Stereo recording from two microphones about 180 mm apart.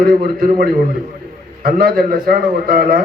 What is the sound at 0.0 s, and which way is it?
A man's voice, 55° right (ahead or behind).